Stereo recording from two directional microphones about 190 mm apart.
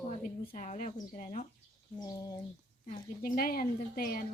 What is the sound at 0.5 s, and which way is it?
Speech, 40° left (ahead or behind).